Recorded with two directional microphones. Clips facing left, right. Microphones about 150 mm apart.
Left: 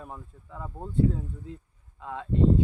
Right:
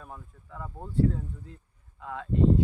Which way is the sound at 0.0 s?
20° left (ahead or behind).